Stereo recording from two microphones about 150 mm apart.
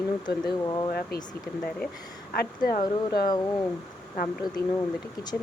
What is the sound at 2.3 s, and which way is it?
Speech, 85° left.